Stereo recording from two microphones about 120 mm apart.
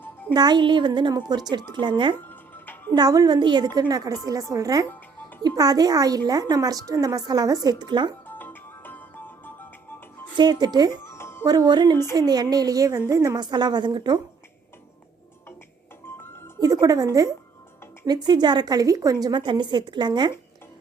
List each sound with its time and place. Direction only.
0.3 s speech: 35° right (ahead or behind)
2.2 s music: 15° left (ahead or behind)
2.9 s speech: 30° right (ahead or behind)
8.3 s music: 15° left (ahead or behind)
10.3 s speech: 35° right (ahead or behind)
11.1 s music: 20° left (ahead or behind)
11.4 s speech: 35° right (ahead or behind)
16.8 s speech: 30° right (ahead or behind)